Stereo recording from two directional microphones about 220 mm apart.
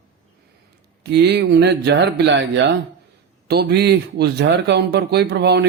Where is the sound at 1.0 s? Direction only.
50° right (ahead or behind).